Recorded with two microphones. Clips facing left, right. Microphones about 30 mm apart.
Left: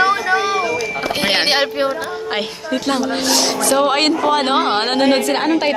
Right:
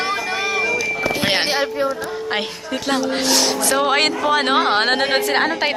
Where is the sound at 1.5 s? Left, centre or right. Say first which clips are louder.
Left 3 dB; left.